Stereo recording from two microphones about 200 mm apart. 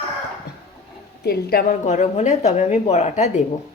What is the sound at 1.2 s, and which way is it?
A woman's voice, 50° left (ahead or behind).